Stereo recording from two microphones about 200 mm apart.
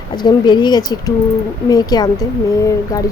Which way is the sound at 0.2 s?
20° left (ahead or behind).